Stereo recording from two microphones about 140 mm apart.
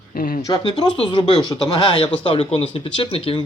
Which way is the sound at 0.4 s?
30° left (ahead or behind).